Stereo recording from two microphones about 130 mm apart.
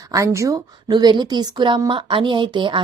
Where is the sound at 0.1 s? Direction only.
25° right (ahead or behind).